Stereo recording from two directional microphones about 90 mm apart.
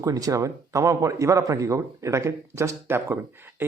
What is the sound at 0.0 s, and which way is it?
A man's voice, 40° right (ahead or behind).